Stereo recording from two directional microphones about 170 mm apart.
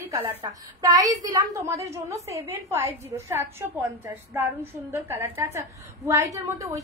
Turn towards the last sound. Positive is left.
turn(degrees=-20)  # may be behind; listen again after turning